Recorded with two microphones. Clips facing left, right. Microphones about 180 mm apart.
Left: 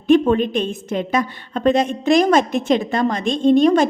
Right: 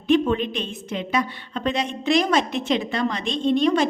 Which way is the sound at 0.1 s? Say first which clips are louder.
Left 5 dB; 45° left (ahead or behind).